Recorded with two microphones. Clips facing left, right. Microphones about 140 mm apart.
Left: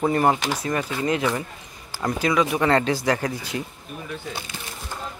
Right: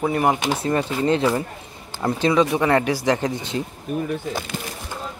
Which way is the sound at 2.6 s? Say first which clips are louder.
Right 1 dB; 15° right (ahead or behind).